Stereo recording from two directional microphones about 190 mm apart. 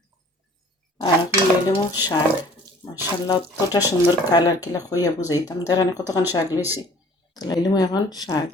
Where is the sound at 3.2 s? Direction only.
20° left (ahead or behind).